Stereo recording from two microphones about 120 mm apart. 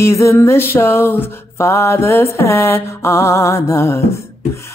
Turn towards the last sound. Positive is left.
turn(degrees=25)  # may be behind; listen again after turning